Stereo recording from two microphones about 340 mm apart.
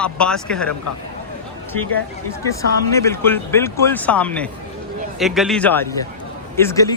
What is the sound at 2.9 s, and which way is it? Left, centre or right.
Speech, centre.